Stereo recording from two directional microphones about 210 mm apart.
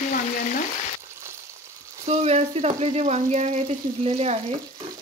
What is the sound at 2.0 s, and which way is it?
Speech, 30° right (ahead or behind).